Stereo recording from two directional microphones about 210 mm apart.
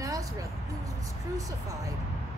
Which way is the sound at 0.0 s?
15° right (ahead or behind).